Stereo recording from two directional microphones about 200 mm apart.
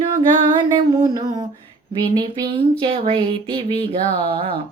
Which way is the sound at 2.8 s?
25° right (ahead or behind).